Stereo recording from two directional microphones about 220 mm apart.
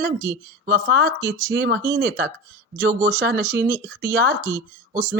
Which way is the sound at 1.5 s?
50° right (ahead or behind).